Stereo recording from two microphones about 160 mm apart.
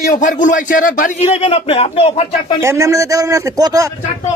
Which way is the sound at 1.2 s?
40° left (ahead or behind).